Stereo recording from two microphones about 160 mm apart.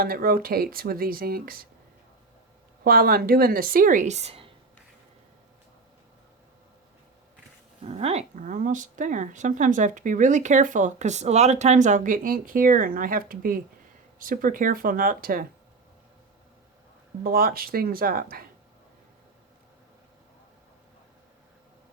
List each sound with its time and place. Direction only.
0.0 s speech: 65° right (ahead or behind)
2.8 s a woman's voice: 70° right (ahead or behind); by 4.5 s 35° right (ahead or behind)
7.9 s a woman's voice: 40° right (ahead or behind); by 15.4 s 65° right (ahead or behind)
17.2 s speech: 65° right (ahead or behind)